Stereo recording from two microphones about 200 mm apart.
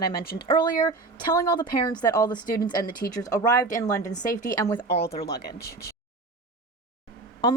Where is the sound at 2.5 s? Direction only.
45° left (ahead or behind).